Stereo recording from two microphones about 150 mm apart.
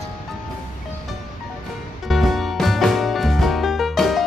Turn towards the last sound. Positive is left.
turn(degrees=0)  # may be behind; listen again after turning